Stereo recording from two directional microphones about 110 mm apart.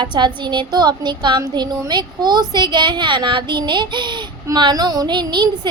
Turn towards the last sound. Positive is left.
turn(degrees=-45)  # may be behind; listen again after turning